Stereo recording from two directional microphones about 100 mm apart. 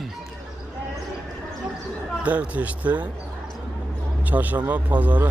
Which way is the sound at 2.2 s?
15° right (ahead or behind).